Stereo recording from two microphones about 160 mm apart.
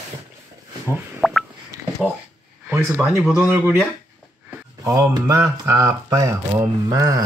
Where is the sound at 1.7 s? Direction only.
20° right (ahead or behind).